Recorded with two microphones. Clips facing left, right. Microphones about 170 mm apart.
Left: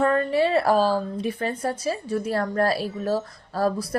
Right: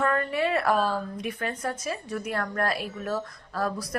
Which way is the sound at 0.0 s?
30° left (ahead or behind).